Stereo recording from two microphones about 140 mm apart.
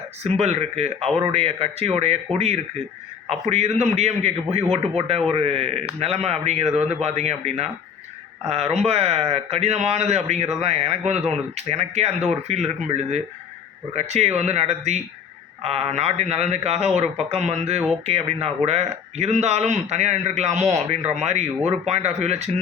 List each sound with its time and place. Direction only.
0.2 s speech: 50° right (ahead or behind)
3.4 s speech: 50° right (ahead or behind)